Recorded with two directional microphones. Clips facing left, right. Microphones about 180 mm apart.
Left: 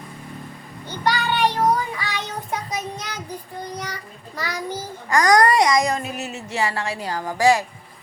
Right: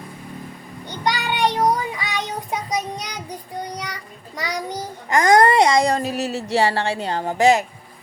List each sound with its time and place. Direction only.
0.9 s child singing: 15° right (ahead or behind)
4.4 s a child's voice: 15° right (ahead or behind)